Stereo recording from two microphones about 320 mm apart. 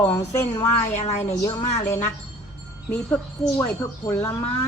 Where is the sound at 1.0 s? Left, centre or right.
Left.